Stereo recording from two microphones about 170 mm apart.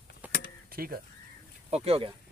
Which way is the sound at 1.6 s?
35° right (ahead or behind).